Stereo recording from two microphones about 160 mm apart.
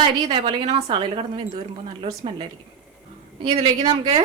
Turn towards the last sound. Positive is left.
turn(degrees=-35)  # may be behind; listen again after turning